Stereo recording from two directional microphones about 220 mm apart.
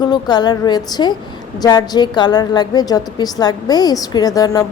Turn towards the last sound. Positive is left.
turn(degrees=15)  # may be behind; listen again after turning